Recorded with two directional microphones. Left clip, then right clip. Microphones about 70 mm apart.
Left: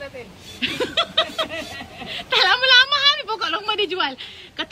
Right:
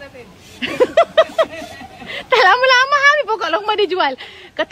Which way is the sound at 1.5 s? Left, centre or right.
Right.